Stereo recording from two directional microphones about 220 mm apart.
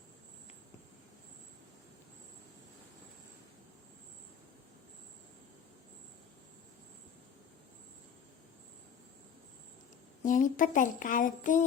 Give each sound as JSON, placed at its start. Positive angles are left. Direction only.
{"t": 10.2, "sound": "speech", "side_deg": 35}